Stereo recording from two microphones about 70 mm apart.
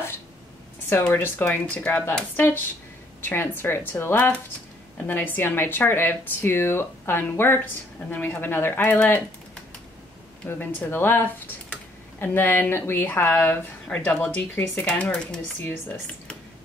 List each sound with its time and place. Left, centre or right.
1.1 s speech: left
1.7 s speech: left
10.6 s speech: left
13.8 s speech: centre